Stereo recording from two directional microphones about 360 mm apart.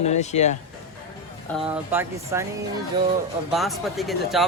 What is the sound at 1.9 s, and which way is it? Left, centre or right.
Speech, centre.